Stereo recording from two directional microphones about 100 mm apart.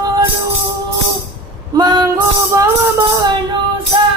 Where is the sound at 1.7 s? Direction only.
45° right (ahead or behind).